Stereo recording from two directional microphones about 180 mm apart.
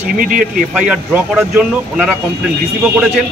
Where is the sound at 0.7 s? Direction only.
5° right (ahead or behind).